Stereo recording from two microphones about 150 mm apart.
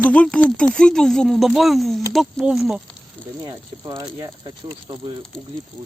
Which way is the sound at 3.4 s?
30° right (ahead or behind).